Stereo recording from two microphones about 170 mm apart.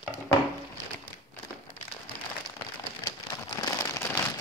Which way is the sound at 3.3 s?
20° left (ahead or behind).